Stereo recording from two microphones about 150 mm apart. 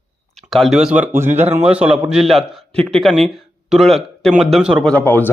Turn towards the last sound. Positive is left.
turn(degrees=10)  # may be behind; listen again after turning